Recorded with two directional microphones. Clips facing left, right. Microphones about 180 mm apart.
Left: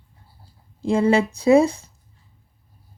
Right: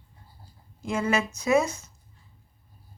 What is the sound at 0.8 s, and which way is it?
Speech, 30° left (ahead or behind).